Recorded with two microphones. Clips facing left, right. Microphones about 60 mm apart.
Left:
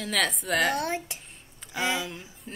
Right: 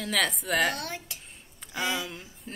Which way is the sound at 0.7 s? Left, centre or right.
Left.